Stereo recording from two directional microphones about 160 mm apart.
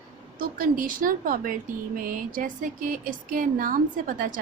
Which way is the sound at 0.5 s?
60° right (ahead or behind).